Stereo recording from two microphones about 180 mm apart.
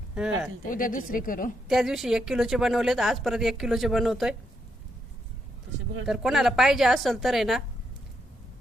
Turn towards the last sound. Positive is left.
turn(degrees=0)  # may be behind; listen again after turning